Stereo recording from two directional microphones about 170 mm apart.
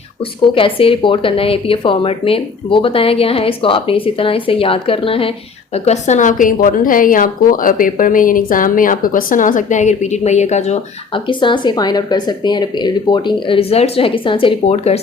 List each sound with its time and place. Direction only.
0.5 s a woman's voice: 30° left (ahead or behind)
11.3 s speech: 30° left (ahead or behind)